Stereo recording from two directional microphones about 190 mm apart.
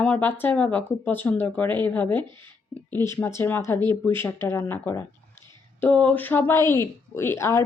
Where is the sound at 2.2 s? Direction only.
25° right (ahead or behind).